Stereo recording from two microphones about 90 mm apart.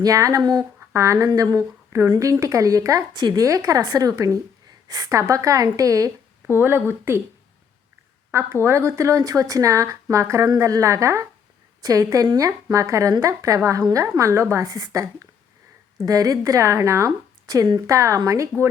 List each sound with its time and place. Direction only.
0.0 s speech: 40° right (ahead or behind)
0.6 s speech: 30° right (ahead or behind)
6.5 s speech: 25° right (ahead or behind)
8.6 s speech: 30° right (ahead or behind)
18.5 s speech: 10° right (ahead or behind)